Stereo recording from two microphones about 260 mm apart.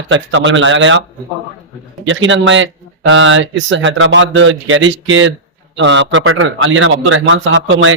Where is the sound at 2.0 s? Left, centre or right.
Right.